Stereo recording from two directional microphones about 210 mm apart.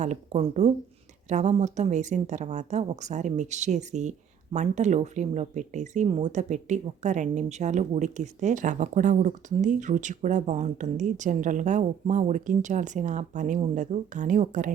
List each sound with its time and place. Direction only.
0.0 s speech: 35° right (ahead or behind)